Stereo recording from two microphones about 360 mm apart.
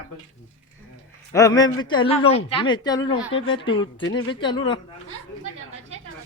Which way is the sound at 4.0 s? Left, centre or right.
Left.